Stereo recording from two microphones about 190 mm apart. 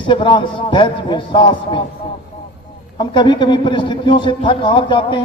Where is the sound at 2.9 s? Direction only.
25° left (ahead or behind).